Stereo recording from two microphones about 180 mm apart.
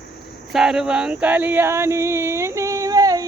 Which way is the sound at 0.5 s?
5° right (ahead or behind).